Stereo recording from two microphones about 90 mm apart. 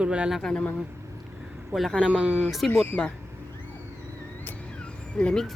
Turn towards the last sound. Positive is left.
turn(degrees=5)  # may be behind; listen again after turning